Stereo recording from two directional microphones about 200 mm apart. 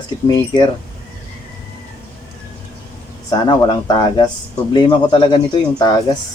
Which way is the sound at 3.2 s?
20° left (ahead or behind).